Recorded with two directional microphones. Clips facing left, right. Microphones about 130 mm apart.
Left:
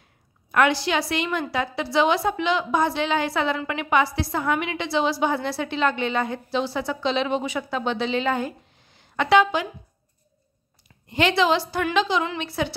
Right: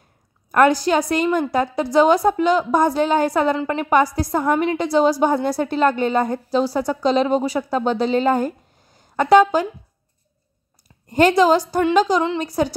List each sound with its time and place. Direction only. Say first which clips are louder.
0.5 s a woman's voice: right 5 dB; 45° right (ahead or behind)
11.1 s a woman's voice: right 6 dB; 45° right (ahead or behind)
11.9 s a sound: right 5 dB; 40° right (ahead or behind)